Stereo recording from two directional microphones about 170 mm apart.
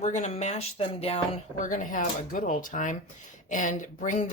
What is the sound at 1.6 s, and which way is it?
Speech, 50° left (ahead or behind).